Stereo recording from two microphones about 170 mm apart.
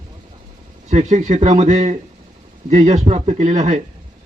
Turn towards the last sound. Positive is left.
turn(degrees=-45)  # may be behind; listen again after turning